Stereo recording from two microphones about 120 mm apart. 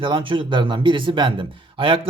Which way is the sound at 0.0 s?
45° right (ahead or behind).